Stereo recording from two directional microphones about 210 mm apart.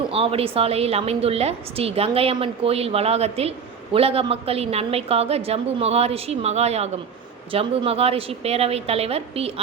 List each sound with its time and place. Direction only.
0.1 s a woman's voice: 25° right (ahead or behind)